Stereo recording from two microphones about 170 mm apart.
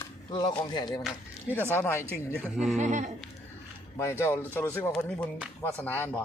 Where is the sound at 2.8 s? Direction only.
45° right (ahead or behind).